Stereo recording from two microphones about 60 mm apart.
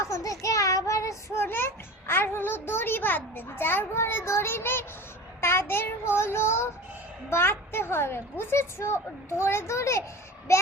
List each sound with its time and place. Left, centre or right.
0.0 s child singing: left
1.4 s music: left
5.4 s a woman's voice: left